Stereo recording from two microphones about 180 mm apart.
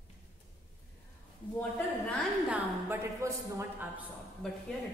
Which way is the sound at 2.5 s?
10° right (ahead or behind).